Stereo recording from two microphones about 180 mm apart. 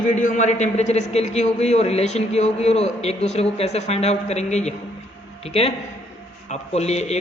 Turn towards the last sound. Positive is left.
turn(degrees=35)  # may be behind; listen again after turning